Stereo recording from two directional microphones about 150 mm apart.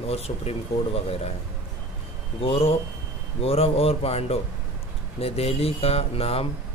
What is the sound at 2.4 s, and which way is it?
Speech, 40° left (ahead or behind).